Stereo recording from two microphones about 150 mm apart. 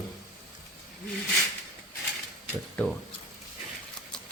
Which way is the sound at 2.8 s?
10° left (ahead or behind).